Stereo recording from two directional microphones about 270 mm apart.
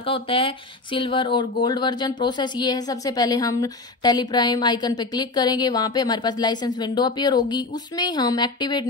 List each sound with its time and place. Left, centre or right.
0.0 s speech: centre